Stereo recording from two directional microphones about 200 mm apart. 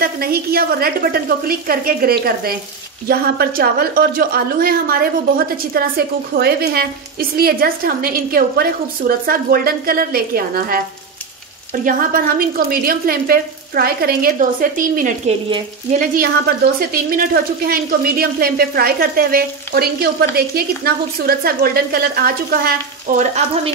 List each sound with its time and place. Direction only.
0.0 s speech: 50° right (ahead or behind)
11.8 s speech: 45° right (ahead or behind)